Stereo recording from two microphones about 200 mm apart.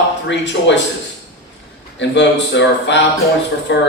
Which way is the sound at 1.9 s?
60° left (ahead or behind).